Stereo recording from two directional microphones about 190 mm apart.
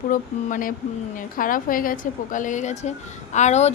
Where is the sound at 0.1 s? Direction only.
45° left (ahead or behind).